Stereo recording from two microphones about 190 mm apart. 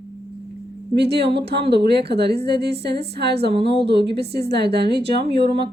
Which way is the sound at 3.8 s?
65° right (ahead or behind).